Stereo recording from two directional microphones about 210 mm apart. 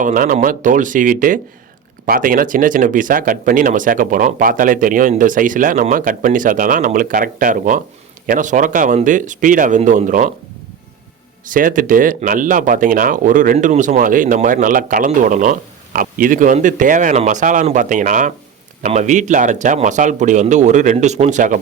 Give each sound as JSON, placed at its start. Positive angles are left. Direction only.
{"t": 0.0, "sound": "speech", "side_deg": -40}
{"t": 11.4, "sound": "speech", "side_deg": -40}